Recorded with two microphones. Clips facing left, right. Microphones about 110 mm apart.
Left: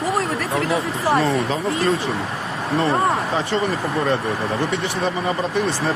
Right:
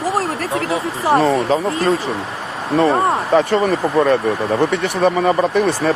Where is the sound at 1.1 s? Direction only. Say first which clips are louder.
Right 6 dB; 40° right (ahead or behind).